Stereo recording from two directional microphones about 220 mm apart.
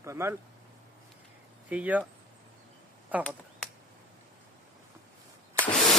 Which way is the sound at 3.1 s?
5° right (ahead or behind).